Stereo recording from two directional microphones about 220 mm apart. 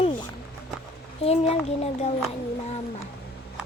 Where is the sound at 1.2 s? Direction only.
30° left (ahead or behind).